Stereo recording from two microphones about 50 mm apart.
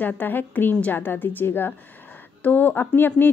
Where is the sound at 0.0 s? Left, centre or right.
Left.